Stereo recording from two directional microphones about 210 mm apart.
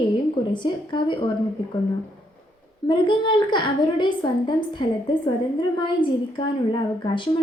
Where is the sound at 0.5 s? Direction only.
20° left (ahead or behind).